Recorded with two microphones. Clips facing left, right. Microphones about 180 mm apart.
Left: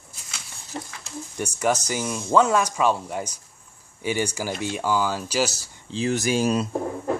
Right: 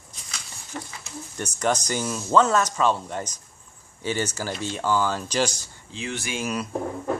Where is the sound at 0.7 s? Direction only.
30° left (ahead or behind).